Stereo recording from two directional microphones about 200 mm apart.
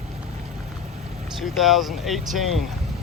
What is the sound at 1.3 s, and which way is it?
Speech, centre (ahead or behind).